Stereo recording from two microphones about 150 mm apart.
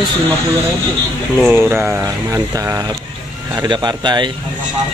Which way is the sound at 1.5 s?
15° right (ahead or behind).